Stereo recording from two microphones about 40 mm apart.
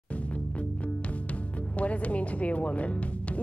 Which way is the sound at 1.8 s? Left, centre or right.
Left.